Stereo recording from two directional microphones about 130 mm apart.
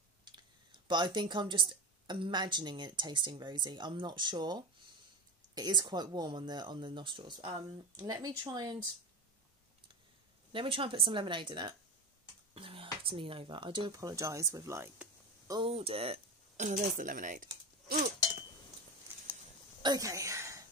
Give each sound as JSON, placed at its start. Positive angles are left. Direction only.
{"t": 0.2, "sound": "speech", "side_deg": -35}
{"t": 10.5, "sound": "speech", "side_deg": -40}
{"t": 15.6, "sound": "speech", "side_deg": -45}
{"t": 16.6, "sound": "speech", "side_deg": -80}
{"t": 19.8, "sound": "a sound", "side_deg": -30}